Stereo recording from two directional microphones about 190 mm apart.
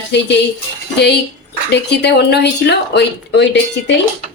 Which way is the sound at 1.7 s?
65° left (ahead or behind).